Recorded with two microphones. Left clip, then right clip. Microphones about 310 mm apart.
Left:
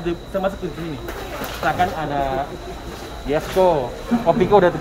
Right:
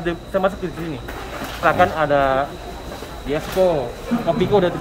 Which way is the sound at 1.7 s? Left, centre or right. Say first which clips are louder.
Right 5 dB; centre.